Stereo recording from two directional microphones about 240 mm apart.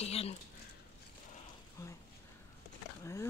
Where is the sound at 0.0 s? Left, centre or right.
Left.